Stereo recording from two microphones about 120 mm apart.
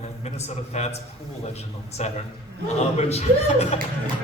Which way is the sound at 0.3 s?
65° left (ahead or behind).